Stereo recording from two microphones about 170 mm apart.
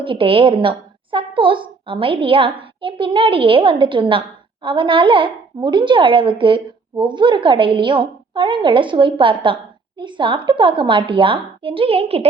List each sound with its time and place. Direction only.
0.0 s a woman's voice: 30° right (ahead or behind)
1.1 s a sound: 30° right (ahead or behind)
1.9 s a woman's voice: 30° right (ahead or behind)